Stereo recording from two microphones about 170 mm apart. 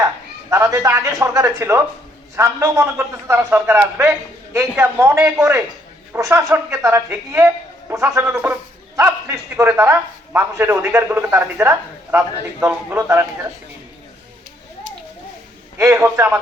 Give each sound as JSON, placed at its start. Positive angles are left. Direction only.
{"t": 0.5, "sound": "a man's voice", "side_deg": -20}
{"t": 15.8, "sound": "a man's voice", "side_deg": -15}